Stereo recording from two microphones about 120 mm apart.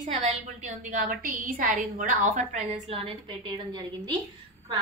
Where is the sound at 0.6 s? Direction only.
90° right.